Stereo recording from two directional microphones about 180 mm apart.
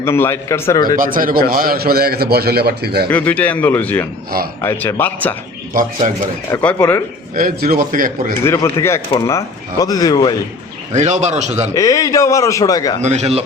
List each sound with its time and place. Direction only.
0.0 s a man's voice: 15° left (ahead or behind)
0.9 s a man's voice: 50° right (ahead or behind)
3.1 s a man's voice: 10° left (ahead or behind)
5.7 s a man's voice: 50° right (ahead or behind)
6.5 s a man's voice: 10° left (ahead or behind)
7.3 s a man's voice: 50° right (ahead or behind)
8.4 s speech: 15° left (ahead or behind)
10.9 s a man's voice: 40° right (ahead or behind)
11.7 s a man's voice: 20° left (ahead or behind)
13.0 s a man's voice: 40° right (ahead or behind)